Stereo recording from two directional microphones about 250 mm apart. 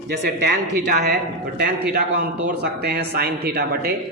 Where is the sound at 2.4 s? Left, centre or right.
Right.